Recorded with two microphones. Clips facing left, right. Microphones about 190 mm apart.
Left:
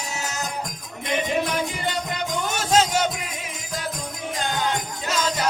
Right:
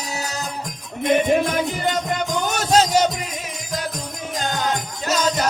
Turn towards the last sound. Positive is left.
turn(degrees=-40)  # may be behind; listen again after turning